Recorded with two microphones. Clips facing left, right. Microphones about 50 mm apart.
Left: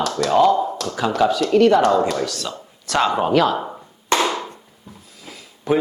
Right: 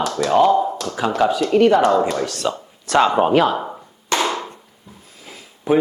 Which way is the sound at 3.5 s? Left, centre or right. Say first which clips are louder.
Right 1 dB; centre.